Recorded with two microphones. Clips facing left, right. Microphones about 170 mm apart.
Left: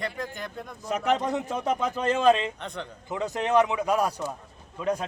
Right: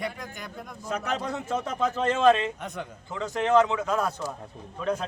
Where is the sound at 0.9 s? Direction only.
15° left (ahead or behind).